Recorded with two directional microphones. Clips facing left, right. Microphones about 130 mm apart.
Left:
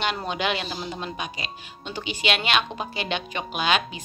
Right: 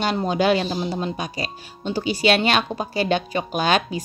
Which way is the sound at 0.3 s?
35° right (ahead or behind).